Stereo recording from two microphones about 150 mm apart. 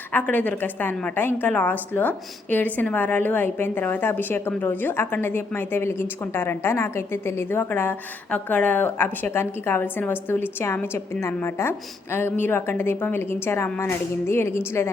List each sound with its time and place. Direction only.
0.1 s a woman's voice: 10° left (ahead or behind)